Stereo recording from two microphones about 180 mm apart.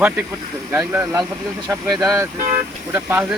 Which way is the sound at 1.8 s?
Centre (ahead or behind).